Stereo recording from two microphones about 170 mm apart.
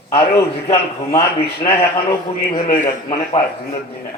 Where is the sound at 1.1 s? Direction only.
35° left (ahead or behind).